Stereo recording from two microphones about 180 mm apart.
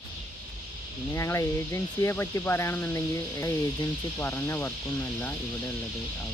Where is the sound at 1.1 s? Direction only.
15° left (ahead or behind).